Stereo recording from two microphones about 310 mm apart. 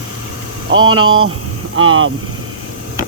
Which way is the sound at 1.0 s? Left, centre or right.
Right.